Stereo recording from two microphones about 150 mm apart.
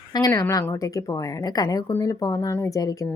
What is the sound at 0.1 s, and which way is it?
Speech, 25° left (ahead or behind).